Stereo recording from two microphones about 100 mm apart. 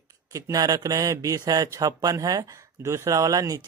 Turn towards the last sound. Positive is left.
turn(degrees=-35)  # may be behind; listen again after turning